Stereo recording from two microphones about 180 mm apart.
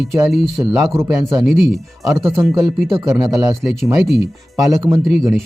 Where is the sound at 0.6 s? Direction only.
15° right (ahead or behind).